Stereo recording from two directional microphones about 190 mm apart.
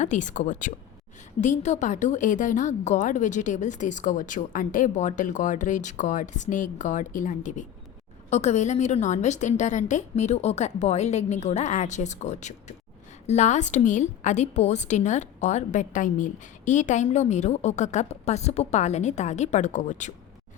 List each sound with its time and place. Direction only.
0.0 s a woman's voice: 40° left (ahead or behind)